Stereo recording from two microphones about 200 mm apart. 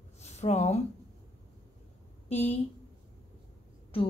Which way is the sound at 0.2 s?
35° left (ahead or behind).